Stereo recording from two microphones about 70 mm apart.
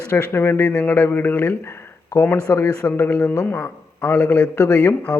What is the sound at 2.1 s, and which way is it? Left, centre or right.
Speech, left.